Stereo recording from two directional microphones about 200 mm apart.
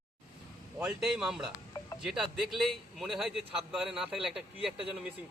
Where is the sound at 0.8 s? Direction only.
5° right (ahead or behind).